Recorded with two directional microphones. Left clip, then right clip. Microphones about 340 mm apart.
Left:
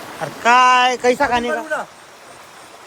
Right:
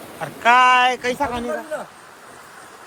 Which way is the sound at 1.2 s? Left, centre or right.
Left.